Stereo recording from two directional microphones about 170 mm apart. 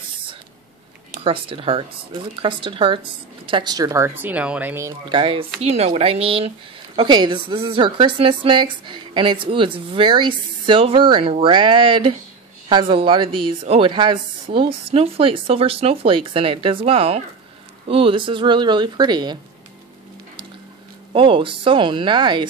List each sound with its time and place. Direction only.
1.2 s speech: 35° right (ahead or behind); by 4.9 s 10° right (ahead or behind)
5.1 s speech: 30° right (ahead or behind)
21.1 s speech: 30° right (ahead or behind)